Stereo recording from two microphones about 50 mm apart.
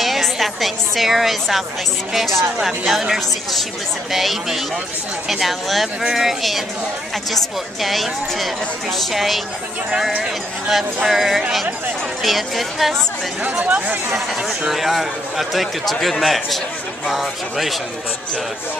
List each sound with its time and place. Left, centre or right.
0.0 s a woman's voice: centre
11.1 s a woman's voice: centre
13.4 s speech: right
14.7 s a man's voice: centre